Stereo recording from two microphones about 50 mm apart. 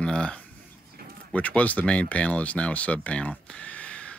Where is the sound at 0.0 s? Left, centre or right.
Left.